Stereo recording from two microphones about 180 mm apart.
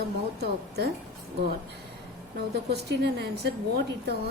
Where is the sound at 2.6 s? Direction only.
65° right (ahead or behind).